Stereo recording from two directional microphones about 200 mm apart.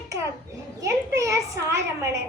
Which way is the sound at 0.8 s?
15° right (ahead or behind).